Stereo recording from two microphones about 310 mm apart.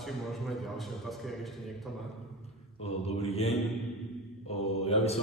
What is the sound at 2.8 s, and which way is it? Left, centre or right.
Speech, centre.